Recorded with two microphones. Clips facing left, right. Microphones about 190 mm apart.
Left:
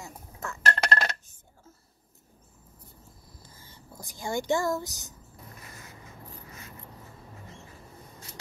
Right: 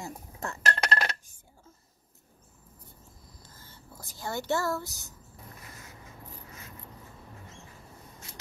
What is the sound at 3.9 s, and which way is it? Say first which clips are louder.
A woman's voice: left 4 dB; 15° left (ahead or behind).